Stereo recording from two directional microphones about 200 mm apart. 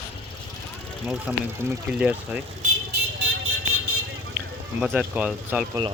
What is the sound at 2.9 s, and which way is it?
Vehicle, 70° right (ahead or behind).